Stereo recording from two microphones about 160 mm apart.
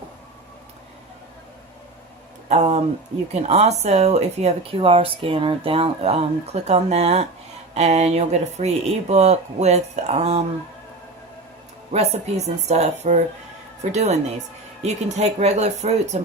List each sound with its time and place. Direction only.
2.5 s speech: 45° right (ahead or behind)
11.9 s speech: 45° right (ahead or behind)